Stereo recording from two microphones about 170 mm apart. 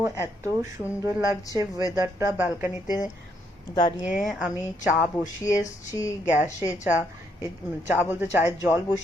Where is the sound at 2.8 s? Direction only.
25° left (ahead or behind).